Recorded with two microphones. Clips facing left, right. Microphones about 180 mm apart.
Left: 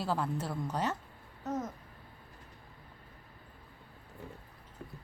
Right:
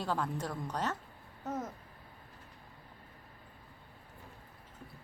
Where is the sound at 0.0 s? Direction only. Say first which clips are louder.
Left 1 dB; 5° left (ahead or behind).